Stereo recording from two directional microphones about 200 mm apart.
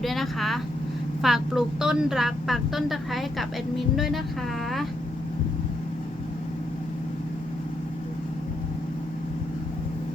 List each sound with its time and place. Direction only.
0.0 s a woman's voice: centre (ahead or behind)